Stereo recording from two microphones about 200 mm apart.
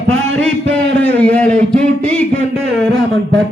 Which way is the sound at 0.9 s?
5° left (ahead or behind).